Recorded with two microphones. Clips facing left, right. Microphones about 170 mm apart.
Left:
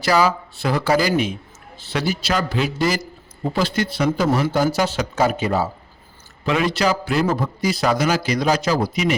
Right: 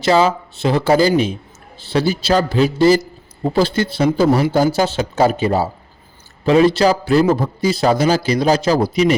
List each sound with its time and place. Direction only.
0.0 s a man's voice: 25° right (ahead or behind)